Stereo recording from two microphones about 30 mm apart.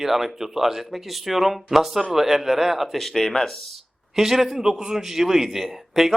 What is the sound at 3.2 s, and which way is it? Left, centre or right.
Speech, centre.